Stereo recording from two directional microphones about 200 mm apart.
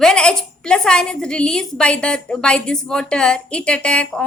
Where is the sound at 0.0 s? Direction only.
5° left (ahead or behind).